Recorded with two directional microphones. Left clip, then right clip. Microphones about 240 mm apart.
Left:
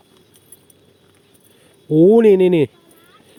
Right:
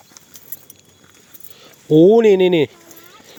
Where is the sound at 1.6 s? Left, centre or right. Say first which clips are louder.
Right 2 dB; centre.